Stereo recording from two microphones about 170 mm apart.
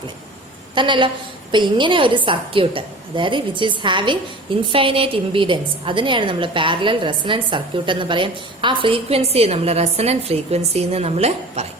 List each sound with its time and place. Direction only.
0.8 s a woman's voice: 30° right (ahead or behind)